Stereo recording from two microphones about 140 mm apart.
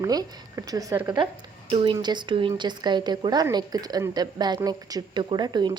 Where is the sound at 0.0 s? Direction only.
25° right (ahead or behind).